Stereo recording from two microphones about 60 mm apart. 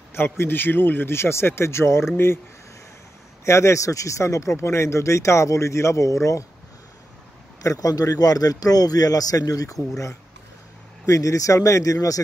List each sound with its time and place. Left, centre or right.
0.1 s speech: left
3.4 s speech: left
7.6 s a man's voice: left